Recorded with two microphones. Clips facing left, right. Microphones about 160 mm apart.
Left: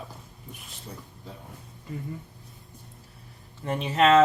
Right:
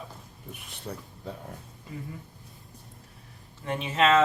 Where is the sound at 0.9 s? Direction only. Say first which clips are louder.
Right 5 dB; 70° right (ahead or behind).